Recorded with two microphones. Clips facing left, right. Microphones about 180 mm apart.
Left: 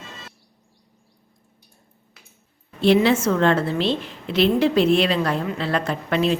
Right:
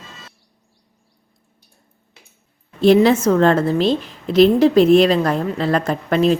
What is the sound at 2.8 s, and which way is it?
A woman's voice, 40° right (ahead or behind).